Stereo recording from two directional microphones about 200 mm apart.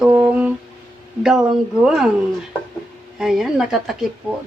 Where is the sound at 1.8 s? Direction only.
Centre (ahead or behind).